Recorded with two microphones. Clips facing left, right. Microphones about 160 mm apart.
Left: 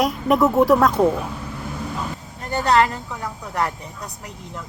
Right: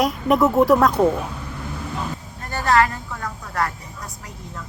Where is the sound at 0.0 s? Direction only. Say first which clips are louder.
Even; centre (ahead or behind).